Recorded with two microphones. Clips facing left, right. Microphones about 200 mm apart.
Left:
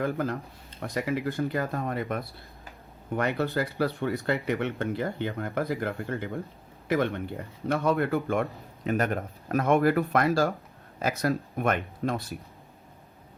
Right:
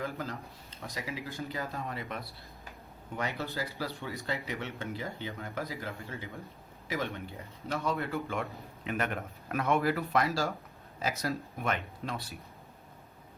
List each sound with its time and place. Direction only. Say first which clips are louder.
0.0 s speech: left 8 dB; 60° left (ahead or behind)